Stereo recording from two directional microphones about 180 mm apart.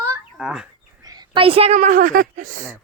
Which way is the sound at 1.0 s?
20° right (ahead or behind).